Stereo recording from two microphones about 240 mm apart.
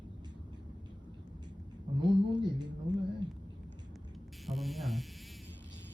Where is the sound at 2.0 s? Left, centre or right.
Centre.